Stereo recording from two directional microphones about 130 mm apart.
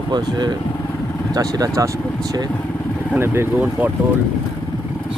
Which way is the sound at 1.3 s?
25° right (ahead or behind).